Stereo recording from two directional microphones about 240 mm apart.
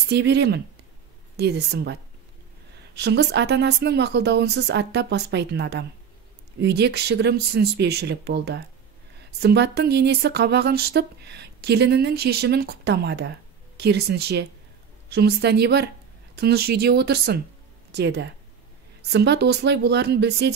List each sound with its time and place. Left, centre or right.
0.1 s speech: right